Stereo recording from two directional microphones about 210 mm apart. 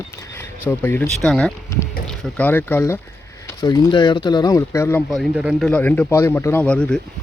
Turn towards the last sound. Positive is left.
turn(degrees=5)  # may be behind; listen again after turning